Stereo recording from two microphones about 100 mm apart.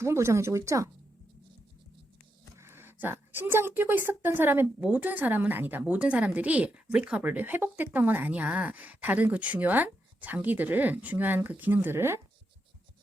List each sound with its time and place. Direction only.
0.0 s speech: 25° right (ahead or behind)
2.6 s a woman's voice: 25° right (ahead or behind)